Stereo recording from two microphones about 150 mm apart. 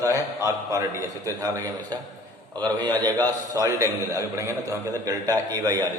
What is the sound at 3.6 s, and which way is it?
A man's voice, 20° right (ahead or behind).